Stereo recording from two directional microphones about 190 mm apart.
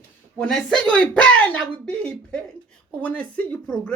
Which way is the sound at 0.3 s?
5° left (ahead or behind).